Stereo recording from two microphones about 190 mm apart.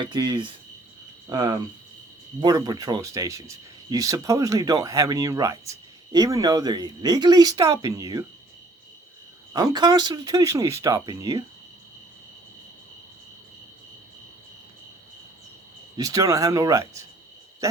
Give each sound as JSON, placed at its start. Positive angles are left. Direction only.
{"t": 0.0, "sound": "speech", "side_deg": -25}
{"t": 9.5, "sound": "speech", "side_deg": -20}
{"t": 16.0, "sound": "speech", "side_deg": -20}
{"t": 17.6, "sound": "owl", "side_deg": -15}